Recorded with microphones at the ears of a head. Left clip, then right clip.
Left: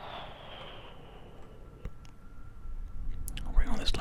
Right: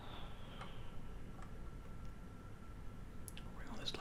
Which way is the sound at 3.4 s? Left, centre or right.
Left.